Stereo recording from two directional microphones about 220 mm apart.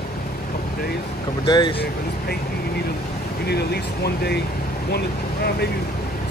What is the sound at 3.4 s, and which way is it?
Speech, 45° left (ahead or behind).